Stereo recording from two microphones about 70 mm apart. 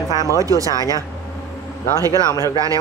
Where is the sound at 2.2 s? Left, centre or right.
Left.